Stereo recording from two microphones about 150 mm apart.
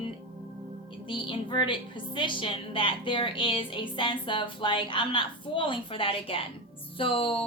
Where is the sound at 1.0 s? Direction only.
35° left (ahead or behind).